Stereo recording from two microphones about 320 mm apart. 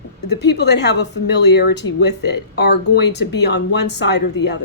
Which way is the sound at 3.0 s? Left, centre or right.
Left.